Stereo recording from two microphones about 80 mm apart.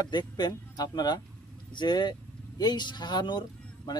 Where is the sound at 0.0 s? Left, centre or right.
Left.